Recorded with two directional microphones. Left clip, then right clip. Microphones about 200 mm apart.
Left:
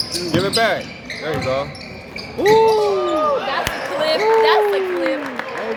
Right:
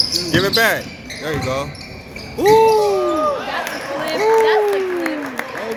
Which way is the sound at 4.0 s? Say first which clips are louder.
Even; 60° left (ahead or behind).